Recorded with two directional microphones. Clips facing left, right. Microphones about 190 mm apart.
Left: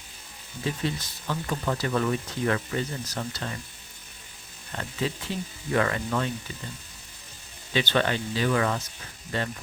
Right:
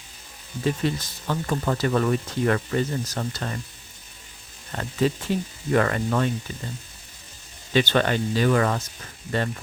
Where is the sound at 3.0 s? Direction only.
45° right (ahead or behind).